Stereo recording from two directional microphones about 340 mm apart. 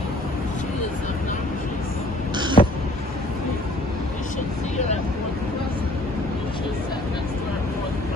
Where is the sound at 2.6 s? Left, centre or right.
Centre.